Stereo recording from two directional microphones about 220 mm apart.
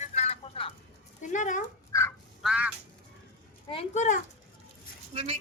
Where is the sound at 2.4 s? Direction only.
5° right (ahead or behind).